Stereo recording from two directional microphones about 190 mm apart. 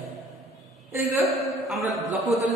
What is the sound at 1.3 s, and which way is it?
A man's voice, centre (ahead or behind).